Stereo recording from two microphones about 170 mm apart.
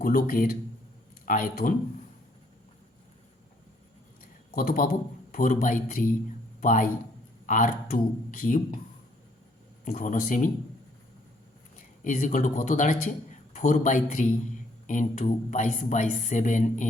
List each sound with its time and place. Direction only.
0.0 s speech: 55° left (ahead or behind)
4.5 s a man's voice: 55° left (ahead or behind)
9.8 s speech: 50° left (ahead or behind)
12.0 s speech: 45° left (ahead or behind)